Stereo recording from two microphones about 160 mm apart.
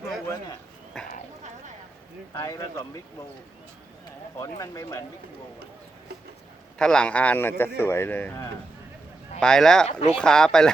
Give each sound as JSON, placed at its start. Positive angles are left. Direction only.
{"t": 0.9, "sound": "speech", "side_deg": 5}
{"t": 2.3, "sound": "speech", "side_deg": 20}
{"t": 4.4, "sound": "speech", "side_deg": 20}
{"t": 6.7, "sound": "speech", "side_deg": 5}